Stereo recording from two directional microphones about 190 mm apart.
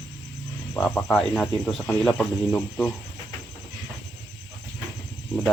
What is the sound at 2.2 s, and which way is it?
Speech, 5° left (ahead or behind).